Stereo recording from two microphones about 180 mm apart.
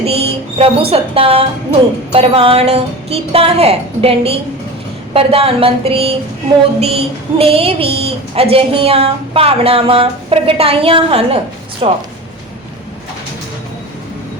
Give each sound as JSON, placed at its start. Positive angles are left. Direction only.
{"t": 0.0, "sound": "music", "side_deg": -35}
{"t": 2.1, "sound": "a woman's voice", "side_deg": -30}